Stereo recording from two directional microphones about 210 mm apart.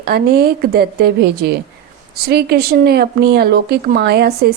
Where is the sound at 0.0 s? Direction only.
45° right (ahead or behind).